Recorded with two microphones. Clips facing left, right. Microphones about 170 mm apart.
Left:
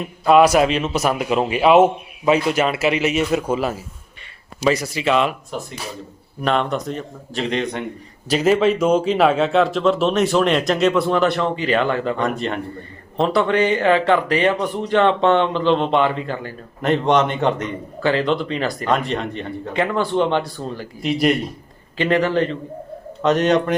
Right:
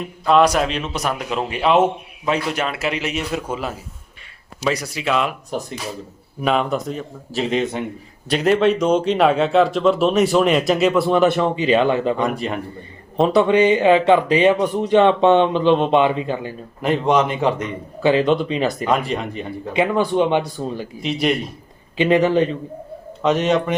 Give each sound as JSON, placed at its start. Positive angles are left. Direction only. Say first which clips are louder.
{"t": 0.3, "sound": "a man's voice", "louder": "left 3 dB", "side_deg": 5}
{"t": 6.4, "sound": "a man's voice", "louder": "right 1 dB", "side_deg": -5}
{"t": 11.2, "sound": "speech", "louder": "right 2 dB", "side_deg": -15}
{"t": 16.8, "sound": "a man's voice", "louder": "even", "side_deg": -5}
{"t": 18.0, "sound": "speech", "louder": "right 3 dB", "side_deg": -15}
{"t": 18.9, "sound": "a man's voice", "louder": "even", "side_deg": -5}
{"t": 19.7, "sound": "speech", "louder": "right 2 dB", "side_deg": -15}
{"t": 21.0, "sound": "a man's voice", "louder": "left 2 dB", "side_deg": 0}
{"t": 21.9, "sound": "speech", "louder": "right 3 dB", "side_deg": -15}
{"t": 23.2, "sound": "a man's voice", "louder": "left 1 dB", "side_deg": -5}